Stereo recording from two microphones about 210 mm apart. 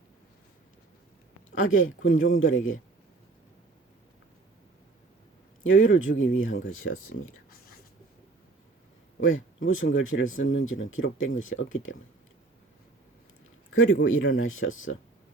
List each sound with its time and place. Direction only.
1.6 s speech: 70° left (ahead or behind)
5.6 s speech: 70° left (ahead or behind)
9.2 s speech: 70° left (ahead or behind)
13.7 s speech: 80° left